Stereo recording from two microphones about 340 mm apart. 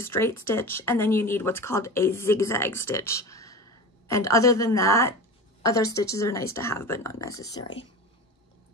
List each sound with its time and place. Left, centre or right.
0.0 s speech: centre